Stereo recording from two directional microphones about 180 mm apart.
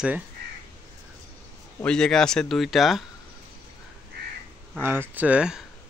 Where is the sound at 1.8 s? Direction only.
5° left (ahead or behind).